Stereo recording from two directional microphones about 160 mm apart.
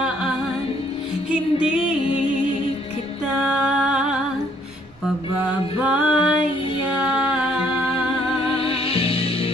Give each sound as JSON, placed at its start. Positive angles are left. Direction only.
{"t": 1.3, "sound": "music", "side_deg": -5}
{"t": 3.4, "sound": "music", "side_deg": -10}
{"t": 5.8, "sound": "music", "side_deg": -10}
{"t": 8.5, "sound": "music", "side_deg": 35}